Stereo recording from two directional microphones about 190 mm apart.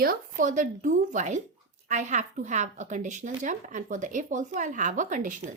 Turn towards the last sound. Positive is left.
turn(degrees=-40)  # may be behind; listen again after turning